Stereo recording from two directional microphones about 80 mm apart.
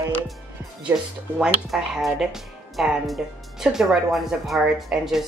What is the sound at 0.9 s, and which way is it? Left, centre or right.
Speech, right.